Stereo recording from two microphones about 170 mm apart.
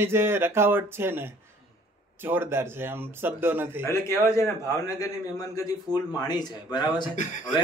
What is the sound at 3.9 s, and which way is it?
A man's voice, 15° left (ahead or behind).